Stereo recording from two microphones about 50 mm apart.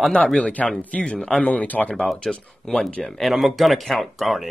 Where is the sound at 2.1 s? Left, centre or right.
Centre.